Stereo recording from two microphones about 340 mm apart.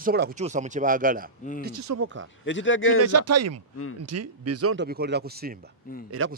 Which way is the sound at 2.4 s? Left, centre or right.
Left.